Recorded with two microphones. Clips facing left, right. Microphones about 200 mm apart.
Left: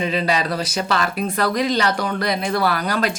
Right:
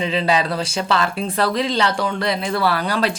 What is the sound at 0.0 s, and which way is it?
Speech, 25° right (ahead or behind).